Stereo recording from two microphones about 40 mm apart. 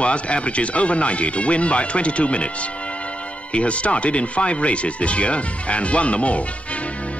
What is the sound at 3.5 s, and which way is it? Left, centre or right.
Speech, left.